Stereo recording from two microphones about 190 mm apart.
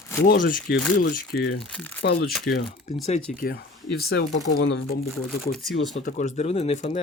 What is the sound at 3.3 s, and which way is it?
Speech, 50° left (ahead or behind).